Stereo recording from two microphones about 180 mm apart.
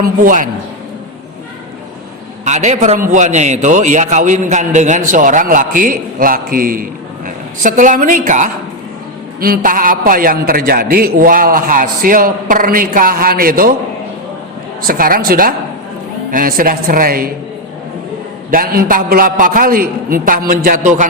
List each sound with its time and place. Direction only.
0.0 s a man's voice: 50° right (ahead or behind)
2.4 s a man's voice: 40° right (ahead or behind)
14.8 s a man's voice: 50° right (ahead or behind)
18.5 s a man's voice: 55° right (ahead or behind)